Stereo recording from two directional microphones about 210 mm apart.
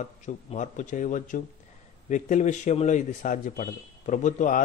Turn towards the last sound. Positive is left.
turn(degrees=35)  # may be behind; listen again after turning